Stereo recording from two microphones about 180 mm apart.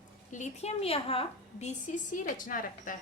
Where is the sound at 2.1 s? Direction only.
50° left (ahead or behind).